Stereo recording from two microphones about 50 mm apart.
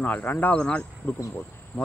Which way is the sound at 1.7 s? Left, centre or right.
Left.